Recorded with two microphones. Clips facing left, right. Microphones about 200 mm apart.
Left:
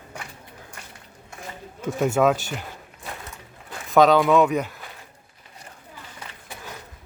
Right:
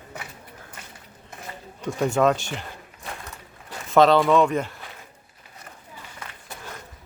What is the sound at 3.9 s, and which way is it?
Speech, centre (ahead or behind).